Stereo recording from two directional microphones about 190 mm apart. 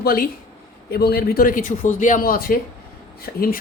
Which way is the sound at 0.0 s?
50° left (ahead or behind).